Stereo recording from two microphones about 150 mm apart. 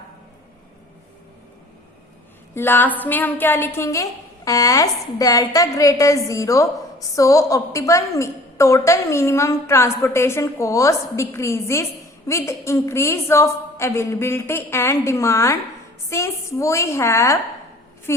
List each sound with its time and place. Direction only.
2.6 s a woman's voice: 15° left (ahead or behind)